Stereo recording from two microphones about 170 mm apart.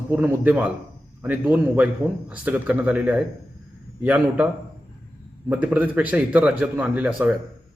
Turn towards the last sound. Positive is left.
turn(degrees=-10)  # may be behind; listen again after turning